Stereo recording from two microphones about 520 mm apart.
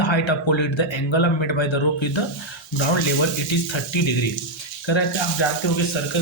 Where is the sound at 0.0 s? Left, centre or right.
Left.